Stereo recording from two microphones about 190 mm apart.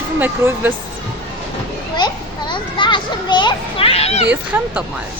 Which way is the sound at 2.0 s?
25° left (ahead or behind).